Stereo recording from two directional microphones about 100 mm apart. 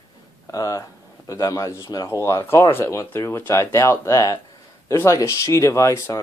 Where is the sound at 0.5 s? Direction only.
35° left (ahead or behind).